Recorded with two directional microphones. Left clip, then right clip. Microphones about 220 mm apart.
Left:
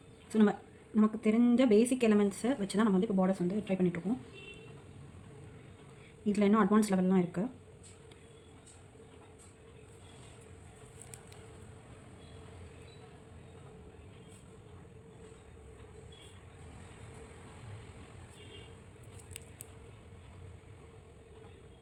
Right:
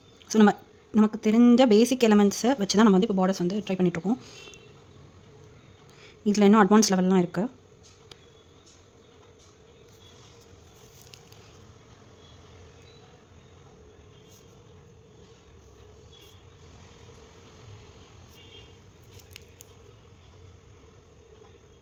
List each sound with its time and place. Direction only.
0.3 s speech: 45° right (ahead or behind)
6.2 s speech: 45° right (ahead or behind)